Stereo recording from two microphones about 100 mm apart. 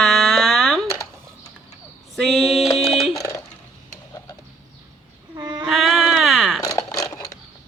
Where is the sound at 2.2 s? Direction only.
5° left (ahead or behind).